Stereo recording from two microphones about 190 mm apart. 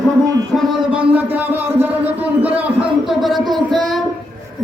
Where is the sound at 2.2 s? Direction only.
10° right (ahead or behind).